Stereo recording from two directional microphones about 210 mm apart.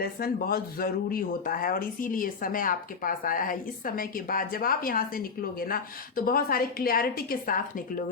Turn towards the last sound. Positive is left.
turn(degrees=40)  # may be behind; listen again after turning